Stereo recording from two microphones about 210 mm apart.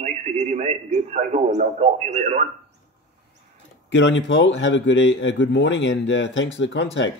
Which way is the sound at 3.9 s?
60° left (ahead or behind).